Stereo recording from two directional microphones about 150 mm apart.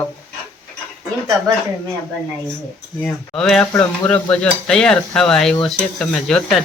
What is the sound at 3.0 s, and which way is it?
Stir, 5° left (ahead or behind).